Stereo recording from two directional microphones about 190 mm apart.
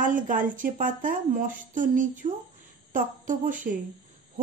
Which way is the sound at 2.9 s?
45° right (ahead or behind).